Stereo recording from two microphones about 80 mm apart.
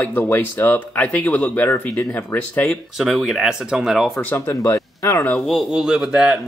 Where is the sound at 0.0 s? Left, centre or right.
Left.